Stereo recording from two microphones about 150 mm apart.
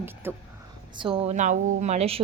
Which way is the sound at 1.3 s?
55° right (ahead or behind).